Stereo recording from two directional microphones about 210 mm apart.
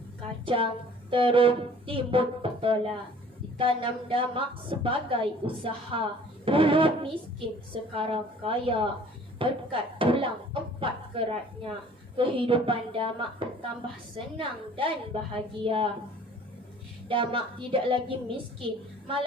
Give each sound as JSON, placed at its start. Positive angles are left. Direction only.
{"t": 0.4, "sound": "a woman's voice", "side_deg": -25}
{"t": 17.1, "sound": "a woman's voice", "side_deg": -25}